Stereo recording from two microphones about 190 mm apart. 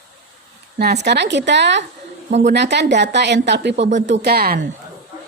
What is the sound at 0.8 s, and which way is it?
A woman's voice, 60° right (ahead or behind).